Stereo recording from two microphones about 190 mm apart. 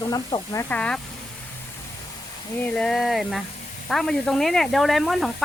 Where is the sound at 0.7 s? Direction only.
5° left (ahead or behind).